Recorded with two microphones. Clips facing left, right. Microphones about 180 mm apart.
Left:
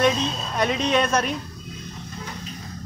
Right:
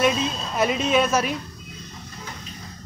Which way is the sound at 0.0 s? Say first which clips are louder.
Left 1 dB; 5° right (ahead or behind).